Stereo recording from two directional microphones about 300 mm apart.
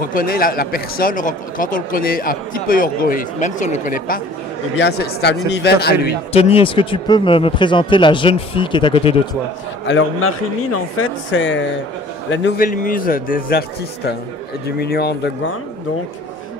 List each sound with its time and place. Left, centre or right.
0.1 s speech: left
6.3 s speech: centre
9.8 s speech: left